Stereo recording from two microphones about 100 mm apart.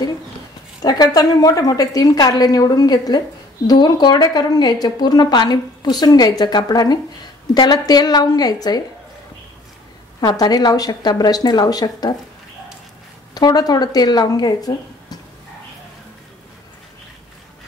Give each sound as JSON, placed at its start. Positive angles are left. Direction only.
{"t": 0.8, "sound": "a woman's voice", "side_deg": 40}
{"t": 10.2, "sound": "a woman's voice", "side_deg": 40}
{"t": 13.3, "sound": "speech", "side_deg": 40}